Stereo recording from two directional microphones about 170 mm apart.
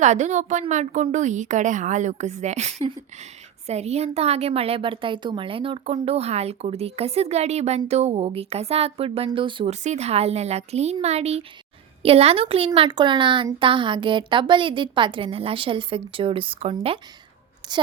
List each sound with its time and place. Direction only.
0.0 s a woman's voice: 45° right (ahead or behind)
9.8 s speech: 40° right (ahead or behind)